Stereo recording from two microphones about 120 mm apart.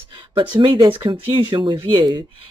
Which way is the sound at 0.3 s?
45° right (ahead or behind).